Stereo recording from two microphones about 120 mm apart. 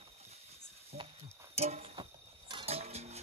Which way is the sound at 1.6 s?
60° right (ahead or behind).